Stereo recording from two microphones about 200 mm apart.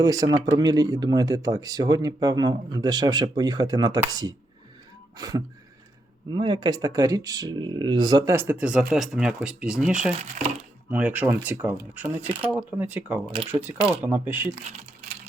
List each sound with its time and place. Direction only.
0.0 s speech: 20° right (ahead or behind)
5.1 s a sound: 20° right (ahead or behind)
6.3 s speech: 25° right (ahead or behind); by 9.9 s 5° right (ahead or behind)
10.1 s speech: 35° right (ahead or behind)
10.9 s speech: 10° right (ahead or behind)